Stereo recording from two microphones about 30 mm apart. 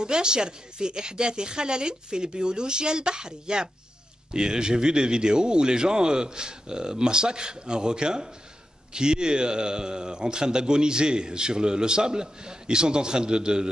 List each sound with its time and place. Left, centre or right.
0.0 s a man's voice: right